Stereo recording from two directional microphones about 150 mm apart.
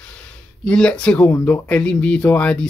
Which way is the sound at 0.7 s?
5° left (ahead or behind).